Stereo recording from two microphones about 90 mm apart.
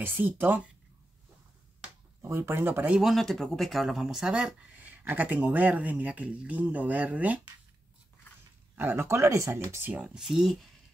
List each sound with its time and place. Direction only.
0.0 s speech: 20° right (ahead or behind)
2.2 s speech: 30° right (ahead or behind)
2.9 s speech: centre (ahead or behind)
8.7 s speech: 25° right (ahead or behind)
9.8 s speech: 10° right (ahead or behind)